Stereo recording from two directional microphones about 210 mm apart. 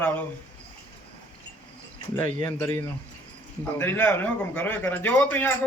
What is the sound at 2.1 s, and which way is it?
A man's voice, 10° left (ahead or behind).